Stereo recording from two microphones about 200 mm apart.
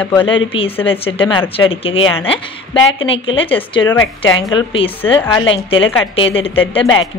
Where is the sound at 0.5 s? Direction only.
30° left (ahead or behind).